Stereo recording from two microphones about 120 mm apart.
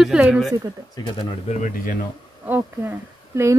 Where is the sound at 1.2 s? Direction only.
80° left.